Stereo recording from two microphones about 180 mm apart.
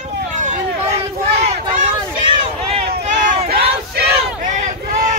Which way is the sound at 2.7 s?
40° right (ahead or behind).